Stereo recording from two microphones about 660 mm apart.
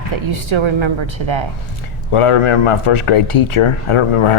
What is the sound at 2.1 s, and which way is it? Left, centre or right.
Speech, left.